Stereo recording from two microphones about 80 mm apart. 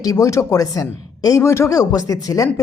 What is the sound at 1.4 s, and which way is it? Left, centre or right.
Speech, left.